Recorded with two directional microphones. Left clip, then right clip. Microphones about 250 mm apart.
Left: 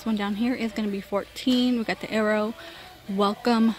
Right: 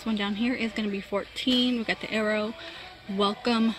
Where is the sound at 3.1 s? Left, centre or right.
Left.